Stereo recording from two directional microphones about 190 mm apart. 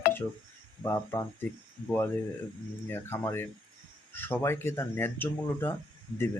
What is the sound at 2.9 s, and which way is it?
Speech, 10° left (ahead or behind).